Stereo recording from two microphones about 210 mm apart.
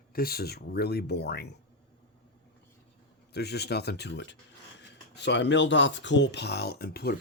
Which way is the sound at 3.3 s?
50° left (ahead or behind).